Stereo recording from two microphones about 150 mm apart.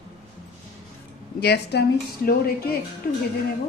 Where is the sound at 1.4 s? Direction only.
90° left.